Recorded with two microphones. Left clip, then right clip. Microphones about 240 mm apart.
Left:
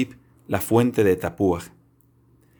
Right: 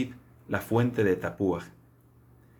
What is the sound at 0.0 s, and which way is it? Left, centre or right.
Speech, left.